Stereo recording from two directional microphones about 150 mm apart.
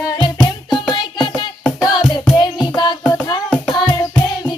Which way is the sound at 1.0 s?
30° left (ahead or behind).